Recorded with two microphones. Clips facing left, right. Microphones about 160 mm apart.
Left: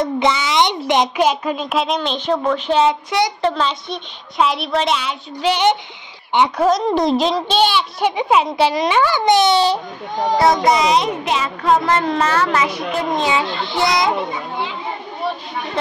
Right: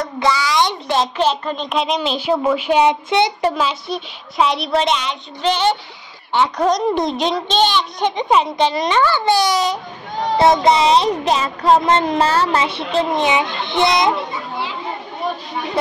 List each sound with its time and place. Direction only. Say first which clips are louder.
0.0 s a child's voice: left 1 dB; 20° left (ahead or behind); by 2.0 s 5° left (ahead or behind)
2.0 s a child's voice: right 1 dB; 10° right (ahead or behind); by 3.3 s 25° right (ahead or behind)
3.4 s a woman's voice: even; 5° right (ahead or behind); by 5.8 s 15° left (ahead or behind)
6.6 s a woman's voice: left 1 dB; centre (ahead or behind); by 9.8 s 30° left (ahead or behind)
10.3 s speech: right 2 dB; 25° right (ahead or behind)
11.8 s a child's voice: right 2 dB; 20° right (ahead or behind)